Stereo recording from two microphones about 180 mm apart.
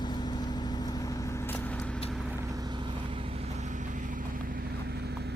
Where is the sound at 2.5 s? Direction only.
25° right (ahead or behind).